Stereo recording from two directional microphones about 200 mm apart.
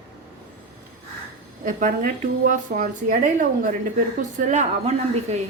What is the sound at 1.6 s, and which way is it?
Speech, 45° right (ahead or behind).